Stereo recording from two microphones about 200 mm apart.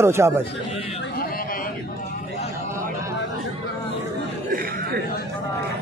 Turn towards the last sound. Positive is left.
turn(degrees=-50)  # may be behind; listen again after turning